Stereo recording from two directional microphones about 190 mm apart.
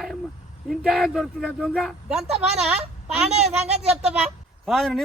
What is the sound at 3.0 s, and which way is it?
A child's voice, 35° right (ahead or behind).